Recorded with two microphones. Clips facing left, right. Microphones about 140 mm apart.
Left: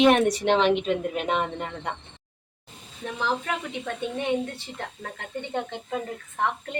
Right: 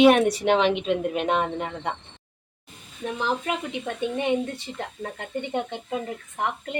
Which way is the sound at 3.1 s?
20° right (ahead or behind).